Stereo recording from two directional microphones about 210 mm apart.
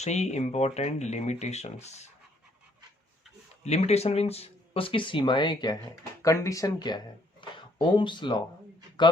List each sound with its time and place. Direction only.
0.0 s speech: 30° left (ahead or behind)
3.6 s a man's voice: 30° left (ahead or behind)